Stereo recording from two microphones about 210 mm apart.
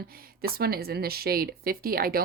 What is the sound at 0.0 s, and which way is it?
A woman's voice, 45° right (ahead or behind).